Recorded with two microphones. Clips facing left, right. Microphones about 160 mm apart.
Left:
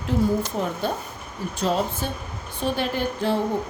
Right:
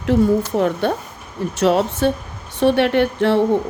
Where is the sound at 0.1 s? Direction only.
70° right (ahead or behind).